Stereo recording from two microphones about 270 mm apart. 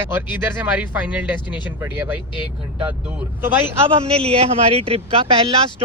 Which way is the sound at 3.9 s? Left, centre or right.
Right.